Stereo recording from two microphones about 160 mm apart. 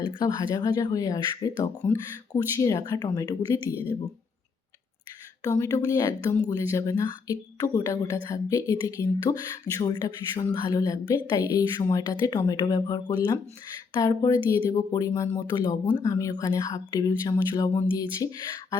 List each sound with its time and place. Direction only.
0.0 s speech: 30° left (ahead or behind)
1.8 s speech: 10° left (ahead or behind)
2.3 s speech: 20° left (ahead or behind)
5.4 s speech: 20° left (ahead or behind)